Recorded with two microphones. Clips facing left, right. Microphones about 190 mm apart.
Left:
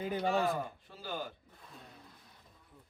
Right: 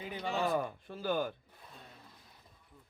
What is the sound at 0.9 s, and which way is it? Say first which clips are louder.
Speech: right 7 dB; 55° right (ahead or behind).